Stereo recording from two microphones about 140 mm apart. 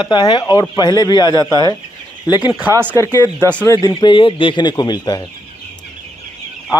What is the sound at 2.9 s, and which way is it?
A man's voice, 25° left (ahead or behind).